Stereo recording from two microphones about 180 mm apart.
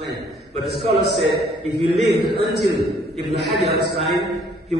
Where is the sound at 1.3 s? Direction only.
60° right (ahead or behind).